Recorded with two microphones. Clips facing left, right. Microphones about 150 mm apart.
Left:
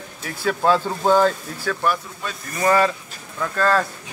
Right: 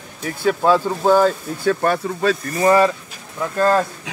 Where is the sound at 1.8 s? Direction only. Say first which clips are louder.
Right 6 dB; 75° right (ahead or behind).